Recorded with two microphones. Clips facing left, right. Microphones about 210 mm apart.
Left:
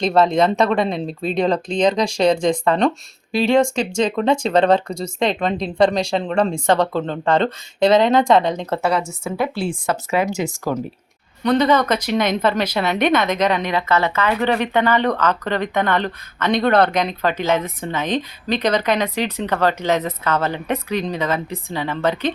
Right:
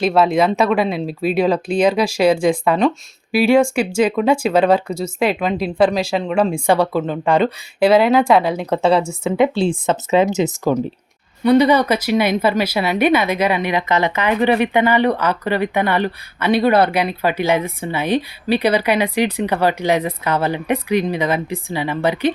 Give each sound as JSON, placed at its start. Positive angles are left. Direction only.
{"t": 0.0, "sound": "speech", "side_deg": -5}
{"t": 8.8, "sound": "speech", "side_deg": -30}